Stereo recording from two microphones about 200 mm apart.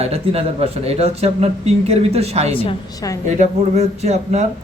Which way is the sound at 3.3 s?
35° right (ahead or behind).